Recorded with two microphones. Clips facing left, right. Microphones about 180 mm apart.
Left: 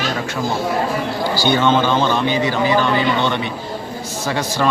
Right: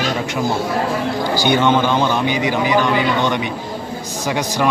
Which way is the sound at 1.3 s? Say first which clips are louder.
Even; 15° right (ahead or behind).